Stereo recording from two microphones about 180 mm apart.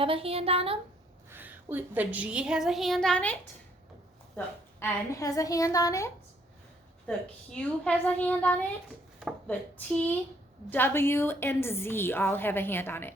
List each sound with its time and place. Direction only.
0.0 s speech: 30° right (ahead or behind)
1.3 s a woman's voice: 10° right (ahead or behind); by 3.3 s 5° left (ahead or behind)
4.4 s a woman's voice: 10° left (ahead or behind)
7.1 s a woman's voice: 5° left (ahead or behind)